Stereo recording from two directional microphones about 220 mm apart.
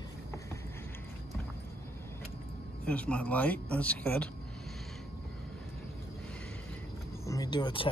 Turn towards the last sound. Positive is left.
turn(degrees=20)  # may be behind; listen again after turning